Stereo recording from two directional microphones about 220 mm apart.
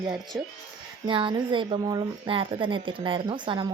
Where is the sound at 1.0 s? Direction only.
20° right (ahead or behind).